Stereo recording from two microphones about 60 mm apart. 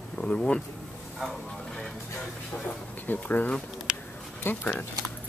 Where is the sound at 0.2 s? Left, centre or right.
Centre.